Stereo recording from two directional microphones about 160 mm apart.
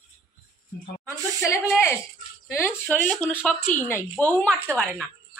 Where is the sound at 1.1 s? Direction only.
15° left (ahead or behind).